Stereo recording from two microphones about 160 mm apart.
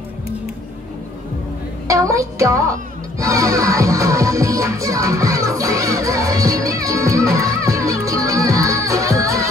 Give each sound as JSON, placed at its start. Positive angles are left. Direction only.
{"t": 1.9, "sound": "a woman's voice", "side_deg": -20}
{"t": 3.2, "sound": "music", "side_deg": -20}